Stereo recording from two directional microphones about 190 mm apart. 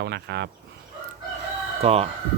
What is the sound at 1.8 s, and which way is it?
Speech, 30° right (ahead or behind).